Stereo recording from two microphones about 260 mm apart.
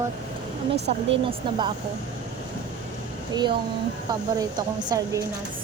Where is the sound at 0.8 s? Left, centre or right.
Right.